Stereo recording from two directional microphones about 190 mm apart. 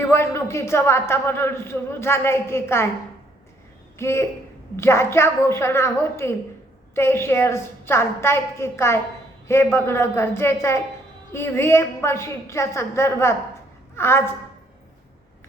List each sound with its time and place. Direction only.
0.0 s a man's voice: 15° left (ahead or behind)
3.9 s a man's voice: 15° left (ahead or behind)